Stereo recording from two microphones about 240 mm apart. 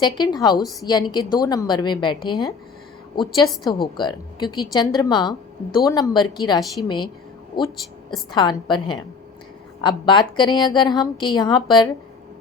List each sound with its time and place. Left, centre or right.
0.0 s a woman's voice: centre
3.9 s a woman's voice: centre